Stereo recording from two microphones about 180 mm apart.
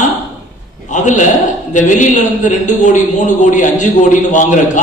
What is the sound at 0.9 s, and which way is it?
A man's voice, 40° left (ahead or behind).